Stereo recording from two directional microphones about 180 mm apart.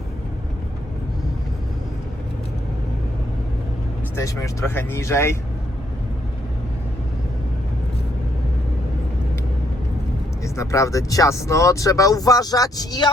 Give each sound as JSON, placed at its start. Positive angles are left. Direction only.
{"t": 4.1, "sound": "speech", "side_deg": 15}
{"t": 10.4, "sound": "speech", "side_deg": 15}